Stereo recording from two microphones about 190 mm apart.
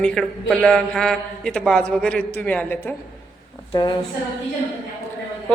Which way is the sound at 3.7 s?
20° left (ahead or behind).